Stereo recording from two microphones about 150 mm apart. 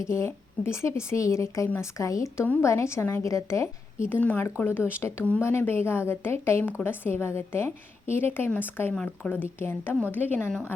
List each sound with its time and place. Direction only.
0.0 s a woman's voice: 20° left (ahead or behind)